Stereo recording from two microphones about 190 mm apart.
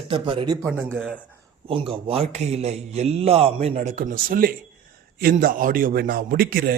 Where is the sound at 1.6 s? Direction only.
30° right (ahead or behind).